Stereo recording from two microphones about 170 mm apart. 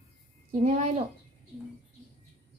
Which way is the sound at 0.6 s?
45° right (ahead or behind).